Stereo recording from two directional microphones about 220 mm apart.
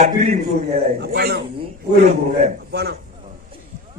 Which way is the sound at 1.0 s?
45° right (ahead or behind).